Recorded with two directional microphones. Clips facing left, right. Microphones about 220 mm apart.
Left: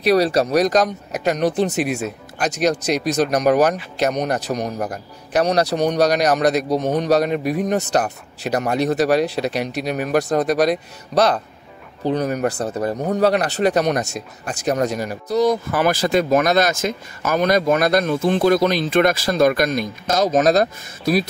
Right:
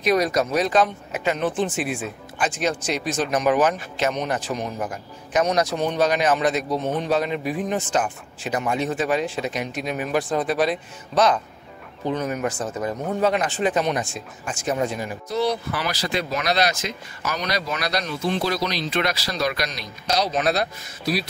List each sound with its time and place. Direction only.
0.0 s a man's voice: 35° left (ahead or behind)
8.7 s speech: 70° left (ahead or behind)
9.5 s a man's voice: 35° left (ahead or behind)